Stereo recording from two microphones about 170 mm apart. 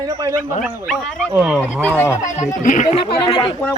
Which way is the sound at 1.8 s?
10° left (ahead or behind).